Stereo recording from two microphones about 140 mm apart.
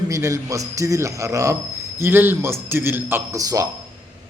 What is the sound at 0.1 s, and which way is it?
A man's voice, 20° right (ahead or behind).